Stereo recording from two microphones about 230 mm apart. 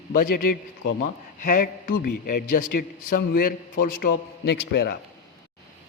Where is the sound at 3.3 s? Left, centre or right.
Left.